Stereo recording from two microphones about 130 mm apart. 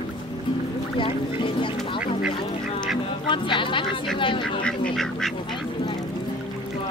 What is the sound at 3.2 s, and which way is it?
Speech, 40° left (ahead or behind).